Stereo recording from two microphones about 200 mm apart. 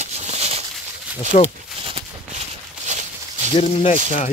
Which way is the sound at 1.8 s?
30° right (ahead or behind).